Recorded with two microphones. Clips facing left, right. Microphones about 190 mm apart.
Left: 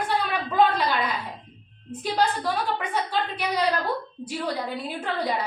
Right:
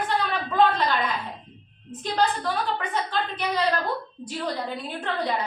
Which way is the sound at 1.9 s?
10° left (ahead or behind).